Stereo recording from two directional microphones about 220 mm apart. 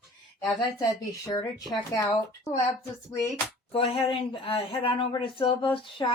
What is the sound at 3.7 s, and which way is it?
Speech, 25° left (ahead or behind).